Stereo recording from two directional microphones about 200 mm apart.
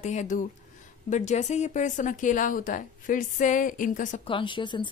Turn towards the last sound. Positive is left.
turn(degrees=25)  # may be behind; listen again after turning